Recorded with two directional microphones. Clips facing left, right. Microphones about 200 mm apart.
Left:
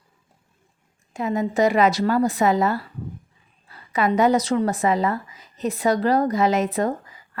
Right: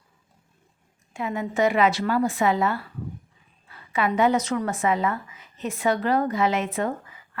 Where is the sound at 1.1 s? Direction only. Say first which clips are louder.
Left 5 dB; 40° left (ahead or behind).